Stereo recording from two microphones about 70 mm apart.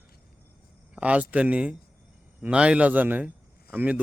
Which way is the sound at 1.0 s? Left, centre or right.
Centre.